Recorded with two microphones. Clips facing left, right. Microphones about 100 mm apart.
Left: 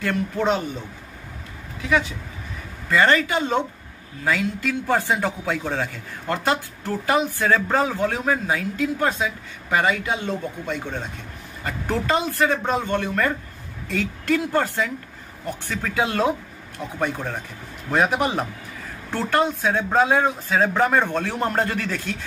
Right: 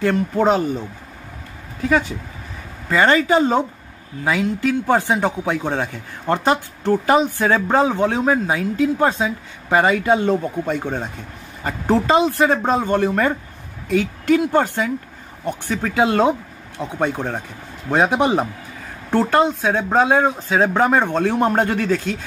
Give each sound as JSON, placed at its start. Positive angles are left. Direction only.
{"t": 0.4, "sound": "speech", "side_deg": -35}
{"t": 1.8, "sound": "speech", "side_deg": -40}
{"t": 2.9, "sound": "speech", "side_deg": -25}
{"t": 4.2, "sound": "a man's voice", "side_deg": -20}
{"t": 10.1, "sound": "speech", "side_deg": -45}
{"t": 11.6, "sound": "a man's voice", "side_deg": -25}
{"t": 13.8, "sound": "a man's voice", "side_deg": -20}